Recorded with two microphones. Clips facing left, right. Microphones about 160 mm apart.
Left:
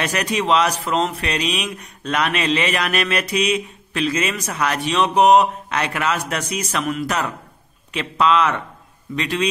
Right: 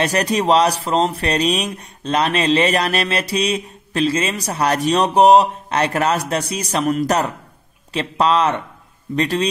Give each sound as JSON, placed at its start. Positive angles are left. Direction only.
{"t": 0.0, "sound": "speech", "side_deg": -35}